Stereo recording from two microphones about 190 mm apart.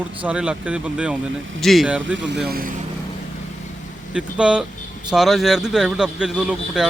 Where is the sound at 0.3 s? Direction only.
5° right (ahead or behind).